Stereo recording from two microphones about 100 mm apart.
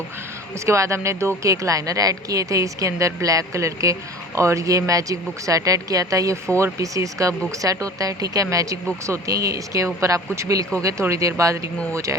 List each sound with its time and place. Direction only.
0.6 s speech: 30° right (ahead or behind)